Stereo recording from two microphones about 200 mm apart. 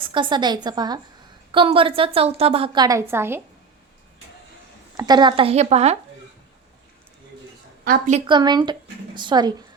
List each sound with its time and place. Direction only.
0.0 s a woman's voice: 25° right (ahead or behind)
4.9 s speech: 20° right (ahead or behind)
7.9 s speech: 40° right (ahead or behind)
8.3 s a woman's voice: 20° right (ahead or behind)